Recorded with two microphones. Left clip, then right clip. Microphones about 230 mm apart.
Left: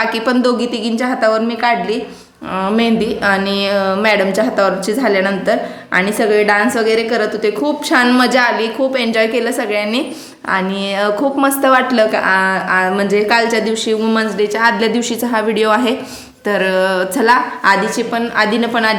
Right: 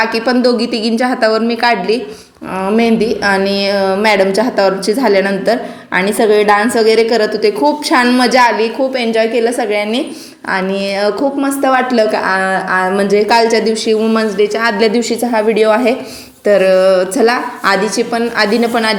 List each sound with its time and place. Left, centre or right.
0.0 s a woman's voice: centre
11.2 s a woman's voice: centre